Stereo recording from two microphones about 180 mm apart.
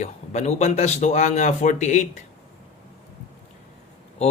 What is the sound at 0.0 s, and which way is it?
Speech, 40° left (ahead or behind).